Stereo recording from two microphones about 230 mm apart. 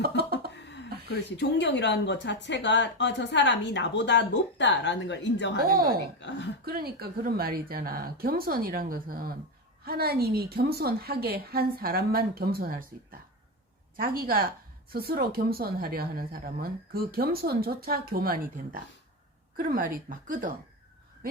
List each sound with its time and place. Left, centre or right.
0.2 s chuckle: right
0.6 s a sound: left
1.4 s a woman's voice: left
6.7 s a woman's voice: right